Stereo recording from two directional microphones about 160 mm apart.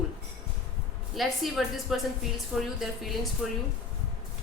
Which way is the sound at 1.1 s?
Centre (ahead or behind).